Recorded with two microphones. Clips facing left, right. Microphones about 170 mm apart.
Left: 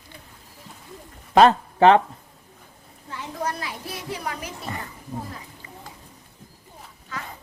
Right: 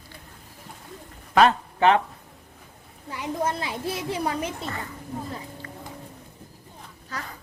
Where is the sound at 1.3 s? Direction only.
35° left (ahead or behind).